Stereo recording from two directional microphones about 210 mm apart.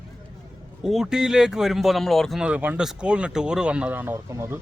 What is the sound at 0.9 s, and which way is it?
Speech, centre (ahead or behind).